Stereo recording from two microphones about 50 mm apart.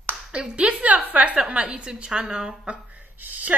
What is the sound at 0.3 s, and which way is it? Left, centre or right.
A woman's voice, right.